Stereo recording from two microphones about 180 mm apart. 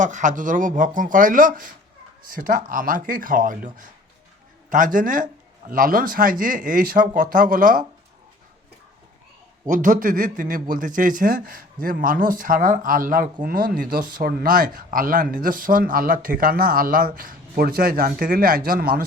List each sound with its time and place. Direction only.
0.0 s speech: 45° right (ahead or behind)
9.6 s speech: 45° right (ahead or behind)